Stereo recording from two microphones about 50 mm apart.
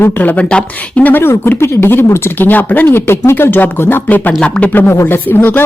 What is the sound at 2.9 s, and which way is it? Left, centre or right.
Speech, left.